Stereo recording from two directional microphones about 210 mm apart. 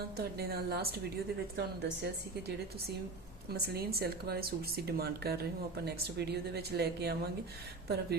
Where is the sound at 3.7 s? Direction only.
45° right (ahead or behind).